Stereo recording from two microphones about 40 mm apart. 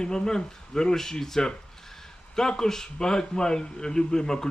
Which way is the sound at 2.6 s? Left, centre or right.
Centre.